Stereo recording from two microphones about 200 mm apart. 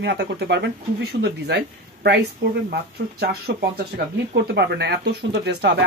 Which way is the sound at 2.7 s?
50° right (ahead or behind).